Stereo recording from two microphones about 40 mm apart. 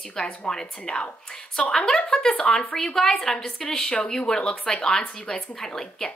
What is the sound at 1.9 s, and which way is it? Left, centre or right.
A woman's voice, left.